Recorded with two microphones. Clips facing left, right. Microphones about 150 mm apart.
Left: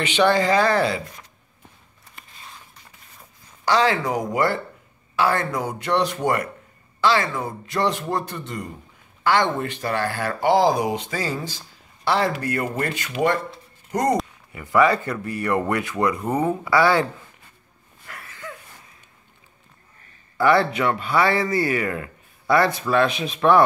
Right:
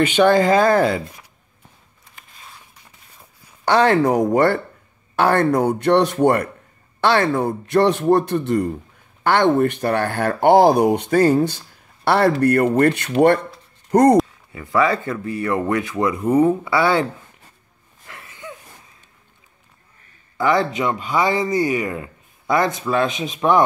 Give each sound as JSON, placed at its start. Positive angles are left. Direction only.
{"t": 0.0, "sound": "speech", "side_deg": -50}
{"t": 3.6, "sound": "speech", "side_deg": -55}
{"t": 14.5, "sound": "speech", "side_deg": -25}
{"t": 18.0, "sound": "a sound", "side_deg": -20}
{"t": 20.3, "sound": "speech", "side_deg": -20}